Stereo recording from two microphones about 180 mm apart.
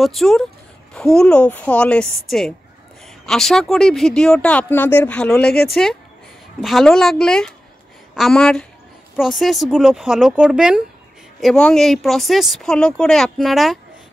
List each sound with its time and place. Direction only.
0.0 s speech: centre (ahead or behind)